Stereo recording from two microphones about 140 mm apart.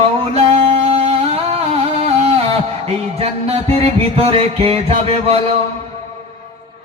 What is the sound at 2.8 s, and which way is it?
A man's voice, 50° right (ahead or behind).